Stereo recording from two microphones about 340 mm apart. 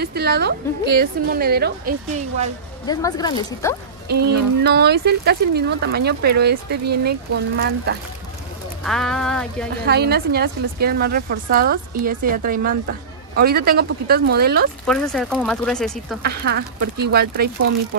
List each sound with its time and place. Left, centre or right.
0.0 s speech: right
2.9 s speech: centre
4.1 s speech: right
8.8 s speech: centre
9.8 s speech: right
14.9 s speech: centre
16.3 s speech: right